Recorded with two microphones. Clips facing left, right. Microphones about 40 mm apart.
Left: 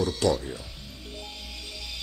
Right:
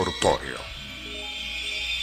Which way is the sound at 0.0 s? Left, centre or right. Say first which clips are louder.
Right 2 dB; right.